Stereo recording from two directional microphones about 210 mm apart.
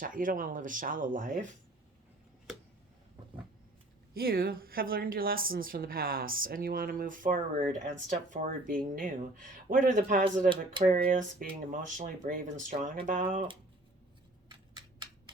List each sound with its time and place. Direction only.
0.0 s speech: 40° right (ahead or behind)
4.1 s a woman's voice: 45° right (ahead or behind)
10.5 s speech: 25° right (ahead or behind)
10.9 s speech: 40° right (ahead or behind)
12.7 s speech: 25° right (ahead or behind)
13.1 s speech: 40° right (ahead or behind)